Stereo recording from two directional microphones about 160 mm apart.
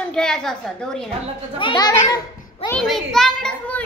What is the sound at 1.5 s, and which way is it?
Speech, 25° left (ahead or behind).